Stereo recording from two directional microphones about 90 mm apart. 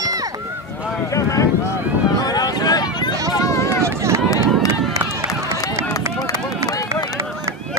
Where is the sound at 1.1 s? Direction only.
40° left (ahead or behind).